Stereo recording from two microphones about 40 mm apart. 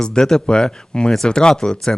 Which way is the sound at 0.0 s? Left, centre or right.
Centre.